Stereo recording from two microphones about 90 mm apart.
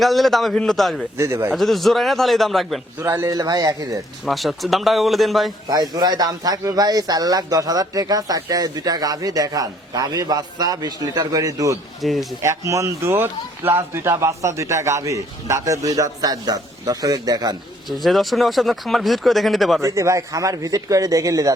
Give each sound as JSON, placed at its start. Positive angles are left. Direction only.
{"t": 0.0, "sound": "speech", "side_deg": 0}
{"t": 1.1, "sound": "speech", "side_deg": -30}
{"t": 1.5, "sound": "speech", "side_deg": 0}
{"t": 3.0, "sound": "speech", "side_deg": -30}
{"t": 4.3, "sound": "speech", "side_deg": 0}
{"t": 5.6, "sound": "speech", "side_deg": -45}
{"t": 12.0, "sound": "speech", "side_deg": 0}
{"t": 12.4, "sound": "speech", "side_deg": -35}
{"t": 17.8, "sound": "speech", "side_deg": 0}
{"t": 19.8, "sound": "speech", "side_deg": -35}